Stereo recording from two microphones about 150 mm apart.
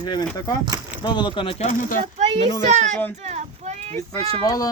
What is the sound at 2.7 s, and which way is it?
Speech, 50° right (ahead or behind).